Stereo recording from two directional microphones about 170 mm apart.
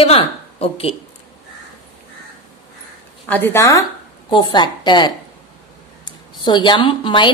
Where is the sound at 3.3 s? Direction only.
15° left (ahead or behind).